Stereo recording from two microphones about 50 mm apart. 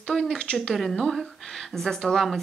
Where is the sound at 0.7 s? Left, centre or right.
Centre.